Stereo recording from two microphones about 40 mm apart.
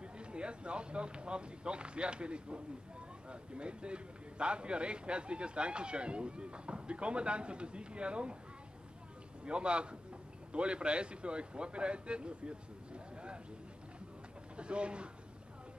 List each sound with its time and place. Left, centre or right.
0.0 s speech: right
9.4 s speech: right
14.6 s a man's voice: right